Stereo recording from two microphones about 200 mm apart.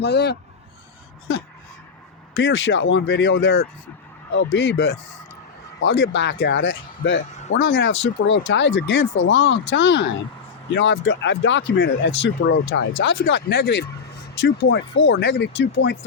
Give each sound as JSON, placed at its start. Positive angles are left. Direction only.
{"t": 0.0, "sound": "speech", "side_deg": 55}
{"t": 2.3, "sound": "speech", "side_deg": 70}
{"t": 4.4, "sound": "speech", "side_deg": 65}